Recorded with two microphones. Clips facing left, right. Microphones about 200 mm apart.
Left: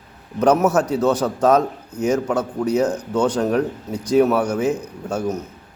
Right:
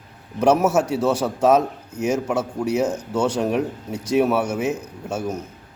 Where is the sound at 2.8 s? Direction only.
25° right (ahead or behind).